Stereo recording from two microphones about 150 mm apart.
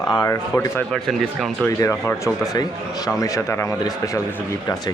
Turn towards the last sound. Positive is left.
turn(degrees=20)  # may be behind; listen again after turning